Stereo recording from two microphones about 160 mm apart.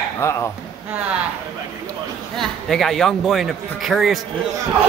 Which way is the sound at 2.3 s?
Centre (ahead or behind).